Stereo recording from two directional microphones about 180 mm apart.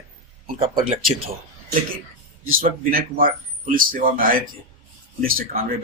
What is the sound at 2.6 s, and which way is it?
Speech, 50° right (ahead or behind).